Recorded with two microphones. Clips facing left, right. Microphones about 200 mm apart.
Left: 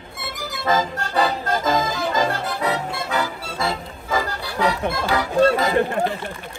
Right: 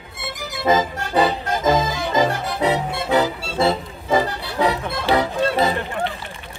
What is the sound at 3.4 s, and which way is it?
Music, 30° right (ahead or behind).